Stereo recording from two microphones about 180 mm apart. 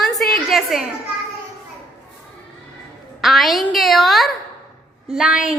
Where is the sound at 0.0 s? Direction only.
Centre (ahead or behind).